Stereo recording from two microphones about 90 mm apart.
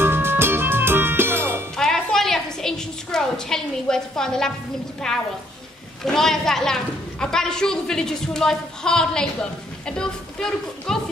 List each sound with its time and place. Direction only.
0.0 s music: 25° right (ahead or behind)
1.8 s a sound: 5° left (ahead or behind)
5.1 s a woman's voice: 5° left (ahead or behind)